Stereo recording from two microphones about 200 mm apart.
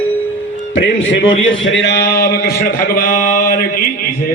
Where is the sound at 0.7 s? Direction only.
70° left (ahead or behind).